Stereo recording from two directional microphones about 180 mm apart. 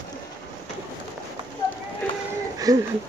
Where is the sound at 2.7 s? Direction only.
20° right (ahead or behind).